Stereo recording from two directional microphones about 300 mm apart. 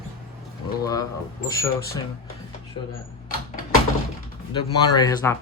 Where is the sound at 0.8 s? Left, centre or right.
Centre.